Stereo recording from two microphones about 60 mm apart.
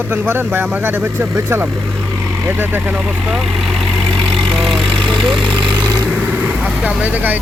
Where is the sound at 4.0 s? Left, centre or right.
Right.